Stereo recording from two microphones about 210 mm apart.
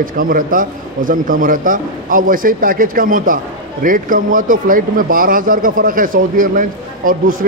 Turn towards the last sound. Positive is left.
turn(degrees=-40)  # may be behind; listen again after turning